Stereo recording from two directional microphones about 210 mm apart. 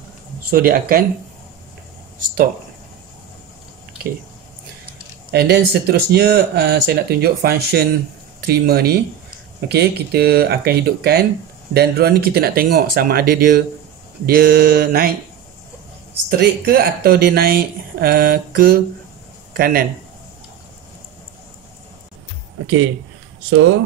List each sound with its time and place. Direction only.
0.5 s speech: 45° right (ahead or behind)
5.3 s speech: 50° right (ahead or behind)
16.3 s speech: 45° right (ahead or behind)
23.5 s speech: 65° right (ahead or behind)